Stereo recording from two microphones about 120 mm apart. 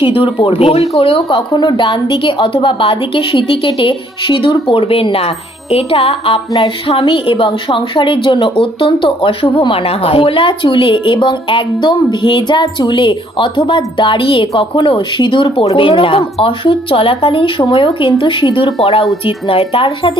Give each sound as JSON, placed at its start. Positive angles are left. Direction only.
{"t": 0.0, "sound": "a woman's voice", "side_deg": 45}